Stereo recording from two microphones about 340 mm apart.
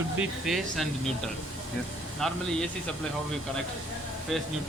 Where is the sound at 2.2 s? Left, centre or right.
Centre.